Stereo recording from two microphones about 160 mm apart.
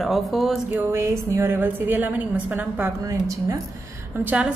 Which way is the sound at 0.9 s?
15° right (ahead or behind).